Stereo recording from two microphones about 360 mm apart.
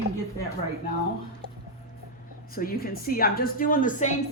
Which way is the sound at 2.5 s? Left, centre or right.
Left.